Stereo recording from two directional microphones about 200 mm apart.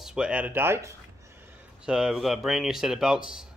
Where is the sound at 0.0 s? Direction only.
5° right (ahead or behind).